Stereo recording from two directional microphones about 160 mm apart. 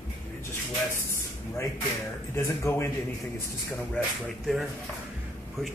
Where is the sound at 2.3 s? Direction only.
15° left (ahead or behind).